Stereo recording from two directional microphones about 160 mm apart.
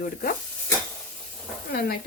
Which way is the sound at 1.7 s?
70° left (ahead or behind).